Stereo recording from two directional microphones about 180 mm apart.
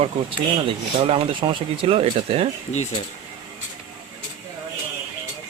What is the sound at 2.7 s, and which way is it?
Speech, 40° left (ahead or behind).